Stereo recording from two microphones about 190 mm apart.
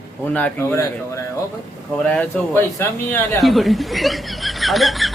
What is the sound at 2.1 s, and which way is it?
Speech, 10° left (ahead or behind).